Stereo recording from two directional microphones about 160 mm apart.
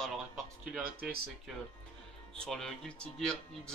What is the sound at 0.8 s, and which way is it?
Speech, 70° right (ahead or behind).